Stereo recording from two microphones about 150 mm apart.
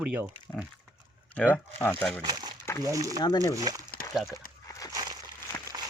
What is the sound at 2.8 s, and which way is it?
Speech, 25° right (ahead or behind).